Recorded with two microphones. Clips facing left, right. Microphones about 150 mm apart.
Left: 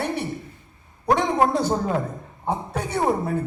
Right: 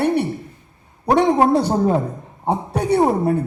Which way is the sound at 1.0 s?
30° right (ahead or behind).